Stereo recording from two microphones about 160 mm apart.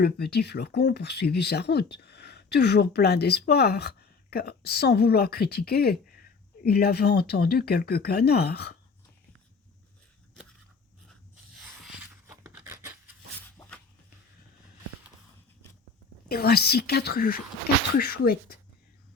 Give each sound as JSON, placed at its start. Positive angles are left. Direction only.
{"t": 0.0, "sound": "speech", "side_deg": 90}
{"t": 12.3, "sound": "a sound", "side_deg": -15}
{"t": 16.3, "sound": "speech", "side_deg": 75}